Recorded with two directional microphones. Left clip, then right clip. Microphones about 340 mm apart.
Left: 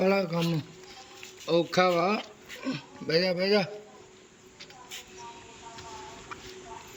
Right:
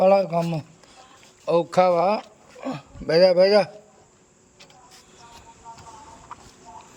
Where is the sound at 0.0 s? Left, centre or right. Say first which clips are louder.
Right 9 dB; centre.